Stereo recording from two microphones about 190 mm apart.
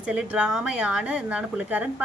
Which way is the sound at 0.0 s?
5° right (ahead or behind).